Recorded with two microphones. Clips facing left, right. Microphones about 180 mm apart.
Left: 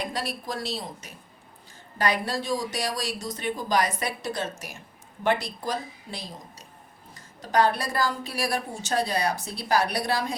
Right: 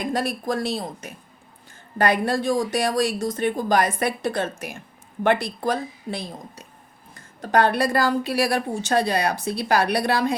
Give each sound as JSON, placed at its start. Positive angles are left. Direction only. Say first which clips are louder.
{"t": 0.0, "sound": "speech", "louder": "right 7 dB", "side_deg": -50}